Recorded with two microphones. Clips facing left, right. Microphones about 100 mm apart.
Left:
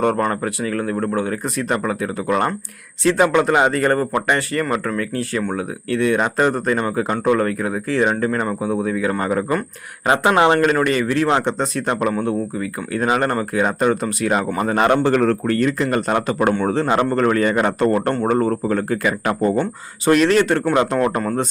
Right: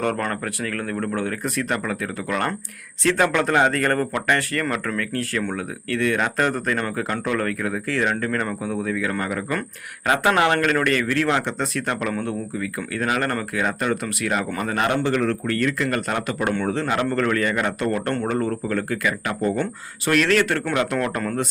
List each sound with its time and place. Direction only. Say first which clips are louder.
0.2 s a man's voice: left 6 dB; 15° left (ahead or behind); by 15.5 s 40° left (ahead or behind)
15.5 s speech: left 4 dB; 25° left (ahead or behind)
16.9 s a man's voice: left 5 dB; 30° left (ahead or behind)
19.2 s a man's voice: left 5 dB; 40° left (ahead or behind)
20.1 s speech: left 5 dB; 25° left (ahead or behind)